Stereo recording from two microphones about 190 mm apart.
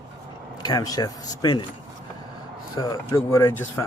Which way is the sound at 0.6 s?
20° left (ahead or behind).